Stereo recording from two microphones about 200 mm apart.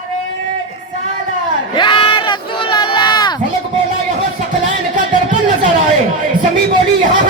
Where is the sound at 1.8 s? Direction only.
25° left (ahead or behind).